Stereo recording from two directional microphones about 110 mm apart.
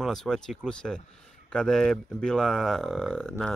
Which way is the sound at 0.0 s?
5° left (ahead or behind).